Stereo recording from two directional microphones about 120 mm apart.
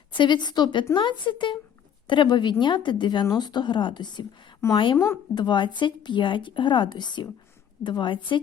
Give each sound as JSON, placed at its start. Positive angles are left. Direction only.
{"t": 0.1, "sound": "a woman's voice", "side_deg": 40}
{"t": 4.9, "sound": "speech", "side_deg": 20}
{"t": 5.3, "sound": "a woman's voice", "side_deg": 40}